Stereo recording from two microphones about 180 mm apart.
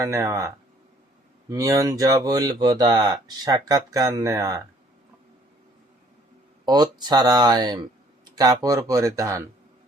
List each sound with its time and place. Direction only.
0.0 s speech: 15° right (ahead or behind)
6.7 s speech: 20° right (ahead or behind)